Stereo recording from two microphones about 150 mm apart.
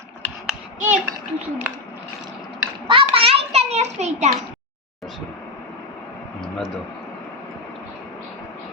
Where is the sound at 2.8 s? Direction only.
35° right (ahead or behind).